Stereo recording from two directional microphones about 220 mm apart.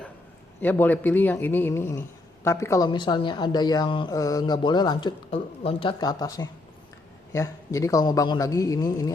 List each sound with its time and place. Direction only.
0.6 s speech: 10° left (ahead or behind)